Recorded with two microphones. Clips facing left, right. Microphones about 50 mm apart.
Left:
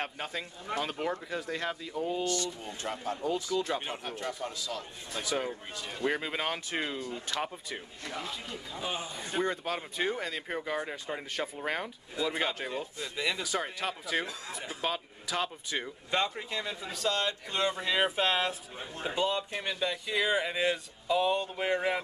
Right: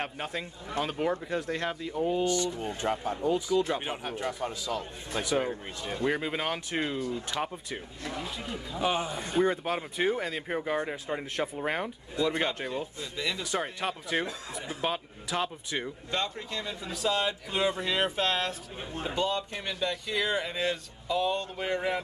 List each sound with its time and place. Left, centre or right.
0.0 s speech: centre
4.6 s speech: right
6.0 s speech: centre
7.0 s speech: left
7.3 s speech: centre
8.7 s a man's voice: right
9.4 s speech: centre
12.2 s speech: centre
13.5 s speech: centre
16.1 s speech: centre
17.0 s speech: centre
17.7 s speech: centre